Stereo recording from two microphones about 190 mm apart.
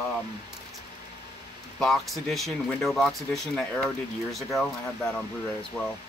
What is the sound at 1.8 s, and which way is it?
Speech, centre (ahead or behind).